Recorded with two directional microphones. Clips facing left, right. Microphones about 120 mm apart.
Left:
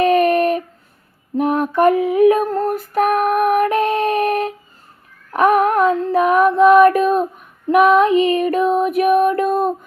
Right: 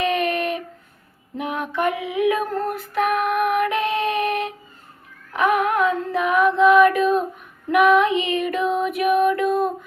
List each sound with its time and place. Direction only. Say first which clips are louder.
0.0 s a sound: left 8 dB; 40° left (ahead or behind)
1.4 s female singing: left 9 dB; 45° left (ahead or behind)
5.3 s child singing: left 5 dB; 45° left (ahead or behind)
7.7 s female singing: left 4 dB; 35° left (ahead or behind)